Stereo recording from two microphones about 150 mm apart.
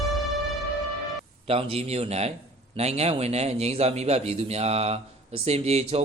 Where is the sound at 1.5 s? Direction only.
40° right (ahead or behind).